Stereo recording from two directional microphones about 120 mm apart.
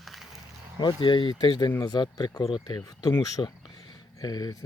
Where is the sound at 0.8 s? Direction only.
40° left (ahead or behind).